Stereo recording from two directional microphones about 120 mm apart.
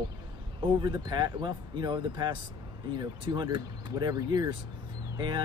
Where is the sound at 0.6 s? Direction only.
40° right (ahead or behind).